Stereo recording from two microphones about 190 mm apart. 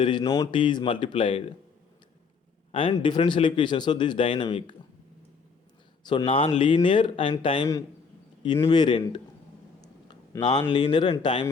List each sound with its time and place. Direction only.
0.0 s speech: 25° left (ahead or behind)
2.7 s speech: 25° left (ahead or behind)
6.0 s speech: 25° left (ahead or behind)